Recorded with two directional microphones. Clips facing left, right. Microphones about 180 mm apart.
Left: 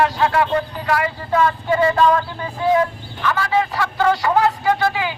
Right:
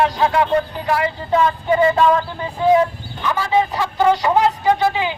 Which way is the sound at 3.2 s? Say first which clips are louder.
Right 1 dB; 15° right (ahead or behind).